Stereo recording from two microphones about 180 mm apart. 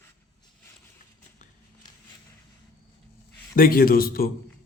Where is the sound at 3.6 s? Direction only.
55° left (ahead or behind).